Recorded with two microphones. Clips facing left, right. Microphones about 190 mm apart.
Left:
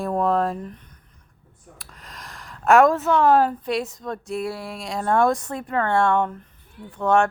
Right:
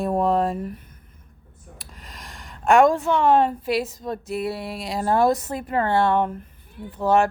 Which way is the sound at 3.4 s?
Centre (ahead or behind).